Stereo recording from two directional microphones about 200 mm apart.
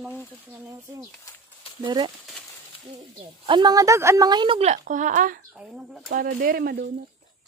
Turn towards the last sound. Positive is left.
turn(degrees=-50)  # may be behind; listen again after turning